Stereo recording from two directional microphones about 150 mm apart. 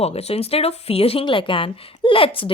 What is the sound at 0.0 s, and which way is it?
Speech, 45° left (ahead or behind).